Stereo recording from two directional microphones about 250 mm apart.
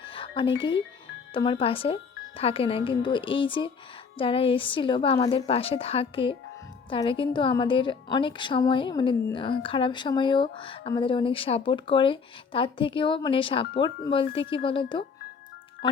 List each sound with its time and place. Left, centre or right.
0.0 s music: left
1.3 s speech: centre